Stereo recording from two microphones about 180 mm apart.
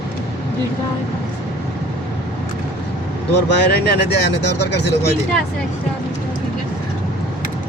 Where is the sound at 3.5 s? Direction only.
70° left (ahead or behind).